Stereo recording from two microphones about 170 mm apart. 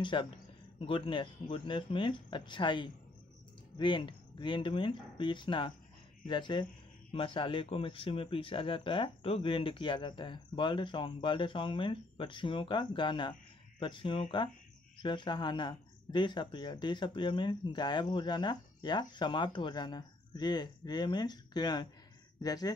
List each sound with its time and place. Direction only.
0.0 s speech: 30° left (ahead or behind)